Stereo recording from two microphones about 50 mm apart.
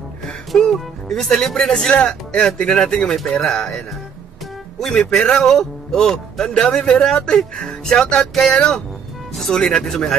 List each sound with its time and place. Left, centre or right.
0.6 s a man's voice: centre
1.9 s a man's voice: left